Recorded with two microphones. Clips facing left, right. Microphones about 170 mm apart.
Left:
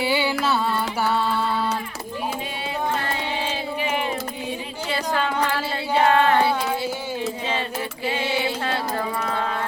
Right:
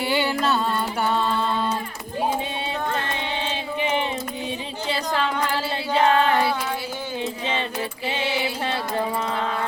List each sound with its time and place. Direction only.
0.0 s music: 5° left (ahead or behind)
5.9 s child singing: 25° left (ahead or behind)